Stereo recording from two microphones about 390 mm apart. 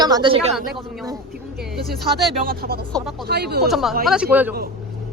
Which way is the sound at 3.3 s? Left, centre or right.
Right.